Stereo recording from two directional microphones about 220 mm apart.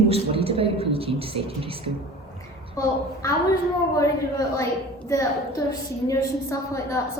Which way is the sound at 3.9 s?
15° left (ahead or behind).